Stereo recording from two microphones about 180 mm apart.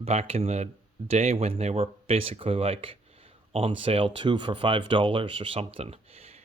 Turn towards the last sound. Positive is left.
turn(degrees=-35)  # may be behind; listen again after turning